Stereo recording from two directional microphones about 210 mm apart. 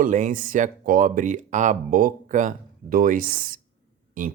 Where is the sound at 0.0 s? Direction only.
40° right (ahead or behind).